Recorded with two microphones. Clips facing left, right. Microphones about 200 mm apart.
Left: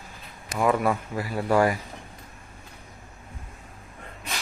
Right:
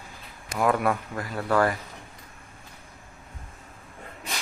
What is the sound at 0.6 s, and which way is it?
Speech, centre (ahead or behind).